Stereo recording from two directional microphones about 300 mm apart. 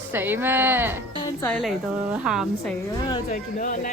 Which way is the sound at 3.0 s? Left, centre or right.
Centre.